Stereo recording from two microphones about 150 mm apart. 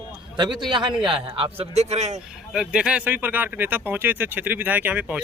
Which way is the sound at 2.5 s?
5° right (ahead or behind).